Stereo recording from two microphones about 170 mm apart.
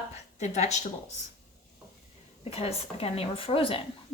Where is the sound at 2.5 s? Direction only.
35° left (ahead or behind).